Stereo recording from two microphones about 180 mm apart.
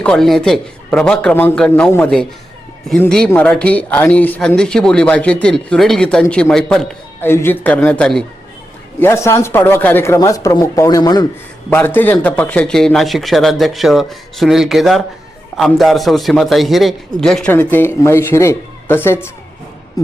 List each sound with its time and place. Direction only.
0.0 s a man's voice: 5° left (ahead or behind); by 11.3 s 20° left (ahead or behind)
11.9 s a man's voice: 10° left (ahead or behind)